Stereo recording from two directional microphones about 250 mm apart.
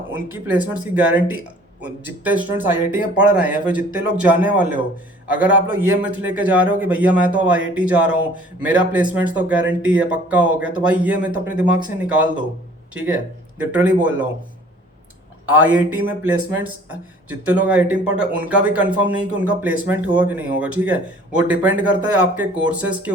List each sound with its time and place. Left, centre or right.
0.1 s speech: centre
13.6 s speech: centre
15.5 s speech: centre